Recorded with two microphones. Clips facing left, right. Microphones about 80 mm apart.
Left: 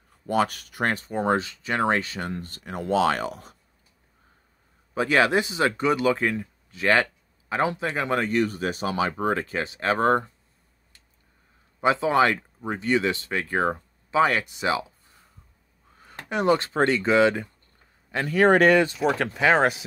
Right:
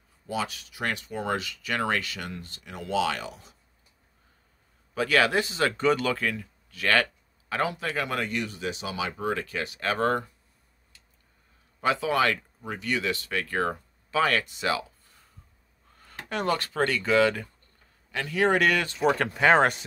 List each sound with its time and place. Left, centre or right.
0.3 s speech: left
4.9 s speech: left
6.2 s speech: left
11.8 s speech: left
18.1 s speech: left
18.7 s speech: left
18.9 s speech: centre